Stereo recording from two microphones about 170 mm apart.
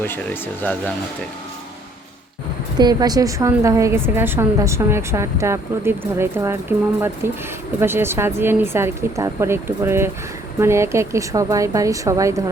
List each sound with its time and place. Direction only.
0.6 s speech: 10° left (ahead or behind)
2.7 s a woman's voice: 25° right (ahead or behind)